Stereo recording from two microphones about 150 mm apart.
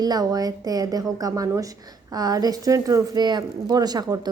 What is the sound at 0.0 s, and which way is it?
A woman's voice, 25° right (ahead or behind).